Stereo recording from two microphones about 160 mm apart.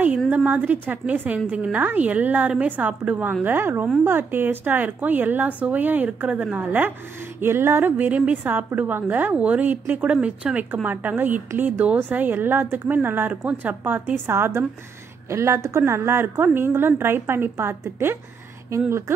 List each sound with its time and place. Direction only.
0.0 s a woman's voice: 10° right (ahead or behind)